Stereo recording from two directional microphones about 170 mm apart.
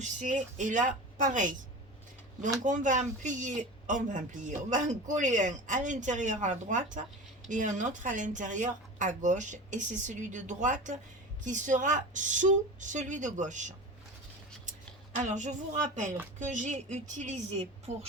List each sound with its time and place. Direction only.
0.0 s speech: 45° right (ahead or behind)
2.6 s speech: 45° right (ahead or behind)
15.2 s a woman's voice: 45° right (ahead or behind)